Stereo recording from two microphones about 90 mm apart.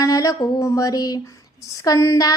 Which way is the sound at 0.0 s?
40° left (ahead or behind).